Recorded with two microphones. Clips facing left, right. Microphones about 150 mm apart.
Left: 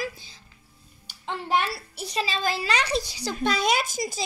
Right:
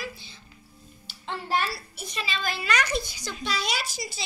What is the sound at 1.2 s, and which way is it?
Speech, 15° left (ahead or behind).